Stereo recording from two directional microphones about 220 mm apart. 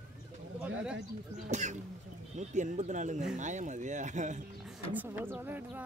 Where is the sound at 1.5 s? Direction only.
30° right (ahead or behind).